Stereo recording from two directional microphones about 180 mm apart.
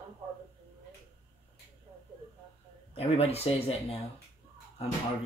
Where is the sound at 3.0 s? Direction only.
35° left (ahead or behind).